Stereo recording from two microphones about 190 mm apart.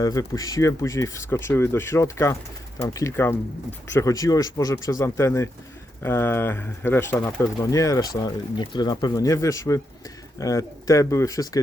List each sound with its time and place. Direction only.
0.0 s speech: 20° left (ahead or behind)